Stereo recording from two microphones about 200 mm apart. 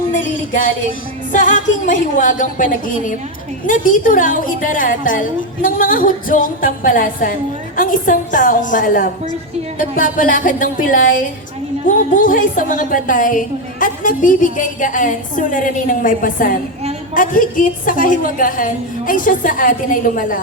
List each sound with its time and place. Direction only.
0.1 s a woman's voice: 40° left (ahead or behind)